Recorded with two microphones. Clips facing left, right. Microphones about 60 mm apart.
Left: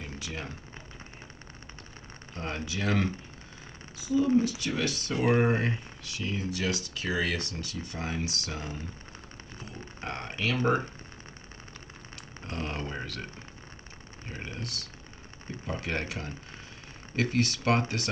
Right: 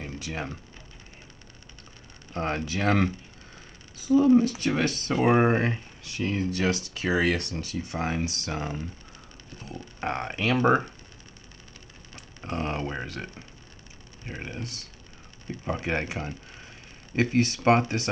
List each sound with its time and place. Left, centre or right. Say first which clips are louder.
0.0 s a sound: right 4 dB; right
2.3 s speech: right 6 dB; right
9.9 s speech: right 6 dB; right
12.4 s speech: right 5 dB; right